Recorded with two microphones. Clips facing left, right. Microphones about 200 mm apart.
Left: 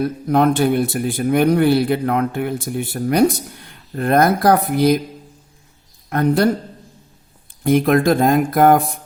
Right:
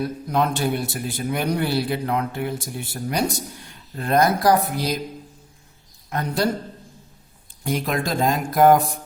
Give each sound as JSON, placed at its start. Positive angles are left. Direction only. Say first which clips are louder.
{"t": 0.0, "sound": "a man's voice", "louder": "left 7 dB", "side_deg": 55}
{"t": 6.1, "sound": "a man's voice", "louder": "left 7 dB", "side_deg": 55}
{"t": 7.6, "sound": "a man's voice", "louder": "left 10 dB", "side_deg": 55}